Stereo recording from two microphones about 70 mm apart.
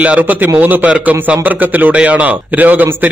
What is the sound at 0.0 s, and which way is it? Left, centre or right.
A man's voice, right.